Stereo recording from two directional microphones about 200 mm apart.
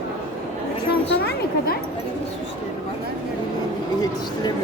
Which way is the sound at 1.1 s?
60° left (ahead or behind).